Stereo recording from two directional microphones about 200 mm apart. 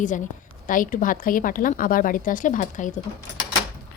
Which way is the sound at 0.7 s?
40° left (ahead or behind).